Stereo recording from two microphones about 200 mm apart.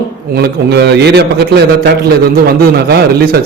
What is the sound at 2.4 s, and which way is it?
Speech, 50° right (ahead or behind).